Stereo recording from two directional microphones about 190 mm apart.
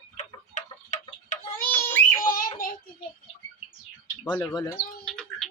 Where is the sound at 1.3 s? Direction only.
40° left (ahead or behind).